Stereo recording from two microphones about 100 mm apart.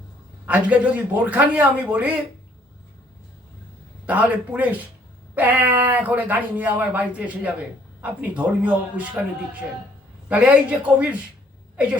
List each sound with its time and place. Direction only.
0.4 s speech: 15° right (ahead or behind)
4.0 s speech: 15° right (ahead or behind)